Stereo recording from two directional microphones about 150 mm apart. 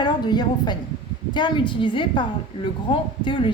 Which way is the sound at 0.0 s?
30° left (ahead or behind).